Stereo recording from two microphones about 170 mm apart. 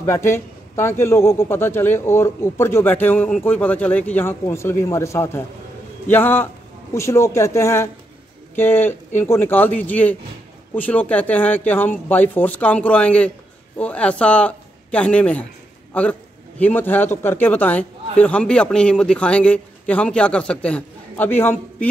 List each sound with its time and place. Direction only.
0.0 s a man's voice: 15° left (ahead or behind)